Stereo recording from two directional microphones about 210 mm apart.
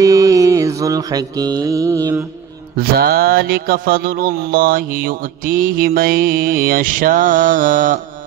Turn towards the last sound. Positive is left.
turn(degrees=-40)  # may be behind; listen again after turning